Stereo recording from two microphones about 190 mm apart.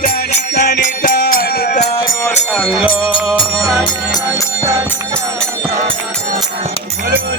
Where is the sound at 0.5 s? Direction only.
55° left (ahead or behind).